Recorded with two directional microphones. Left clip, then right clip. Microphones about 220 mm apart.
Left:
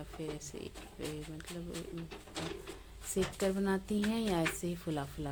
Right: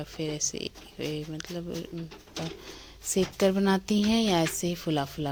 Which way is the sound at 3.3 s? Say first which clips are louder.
Right 11 dB; 35° right (ahead or behind).